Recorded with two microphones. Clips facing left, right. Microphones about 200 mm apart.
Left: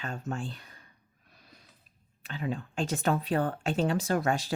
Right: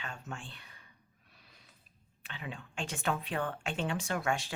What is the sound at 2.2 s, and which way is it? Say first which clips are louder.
Speech: left 10 dB; 40° left (ahead or behind).